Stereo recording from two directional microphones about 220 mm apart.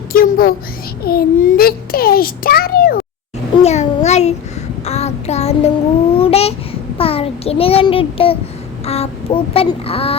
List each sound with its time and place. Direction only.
0.1 s a sound: 40° left (ahead or behind)
1.0 s a child's voice: 40° left (ahead or behind)
3.6 s a child's voice: 30° left (ahead or behind)
6.1 s babbling: 25° left (ahead or behind)
7.0 s child singing: 25° left (ahead or behind)
8.9 s a child's voice: 25° left (ahead or behind)